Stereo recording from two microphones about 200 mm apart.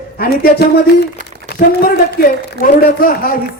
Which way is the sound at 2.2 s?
45° left (ahead or behind).